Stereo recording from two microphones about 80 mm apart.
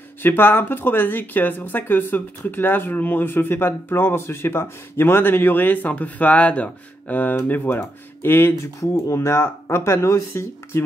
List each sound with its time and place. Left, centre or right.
0.2 s speech: left
8.9 s speech: left